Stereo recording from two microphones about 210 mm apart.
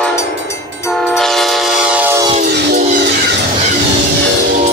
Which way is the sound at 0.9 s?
Centre (ahead or behind).